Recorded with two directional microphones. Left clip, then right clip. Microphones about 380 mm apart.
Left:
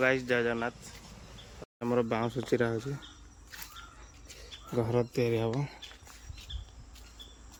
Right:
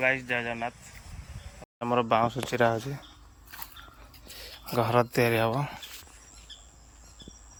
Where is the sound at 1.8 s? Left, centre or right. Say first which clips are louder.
Right 6 dB; centre.